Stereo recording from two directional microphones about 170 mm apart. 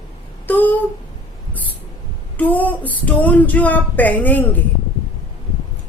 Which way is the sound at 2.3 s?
10° left (ahead or behind).